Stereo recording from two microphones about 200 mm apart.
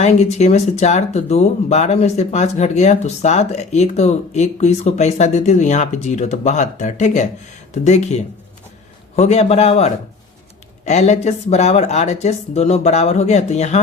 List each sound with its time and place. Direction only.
0.0 s speech: 35° left (ahead or behind)